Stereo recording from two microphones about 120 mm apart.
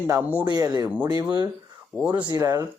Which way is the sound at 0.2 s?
15° right (ahead or behind).